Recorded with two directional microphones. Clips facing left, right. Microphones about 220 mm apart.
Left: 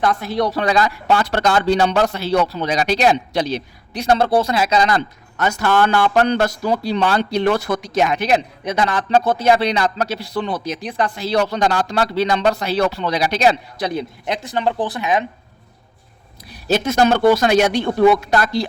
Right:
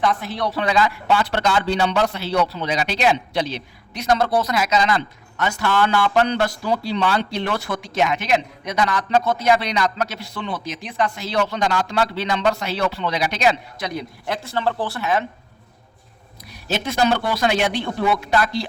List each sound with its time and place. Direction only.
0.3 s speech: 40° left (ahead or behind)
14.3 s speech: 15° left (ahead or behind)
16.5 s a man's voice: 40° left (ahead or behind)